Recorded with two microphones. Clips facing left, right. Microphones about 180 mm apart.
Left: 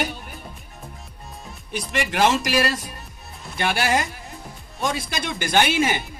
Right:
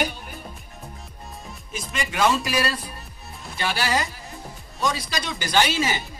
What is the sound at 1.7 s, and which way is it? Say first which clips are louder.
Speech: left 4 dB; 80° left.